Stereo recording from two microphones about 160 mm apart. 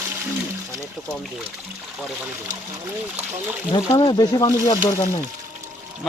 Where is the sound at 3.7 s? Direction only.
30° left (ahead or behind).